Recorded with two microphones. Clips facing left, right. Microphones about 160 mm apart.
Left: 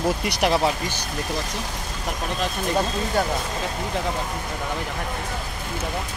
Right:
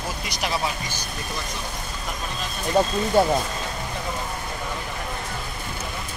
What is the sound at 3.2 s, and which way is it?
Speech, 30° right (ahead or behind).